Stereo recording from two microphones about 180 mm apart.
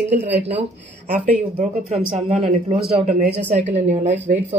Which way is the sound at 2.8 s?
60° right (ahead or behind).